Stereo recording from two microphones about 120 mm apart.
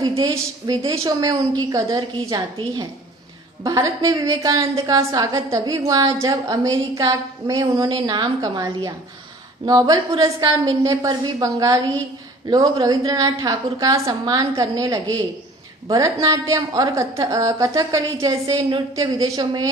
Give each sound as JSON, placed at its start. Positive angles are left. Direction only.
{"t": 0.2, "sound": "a woman's voice", "side_deg": -35}
{"t": 3.6, "sound": "a woman's voice", "side_deg": -30}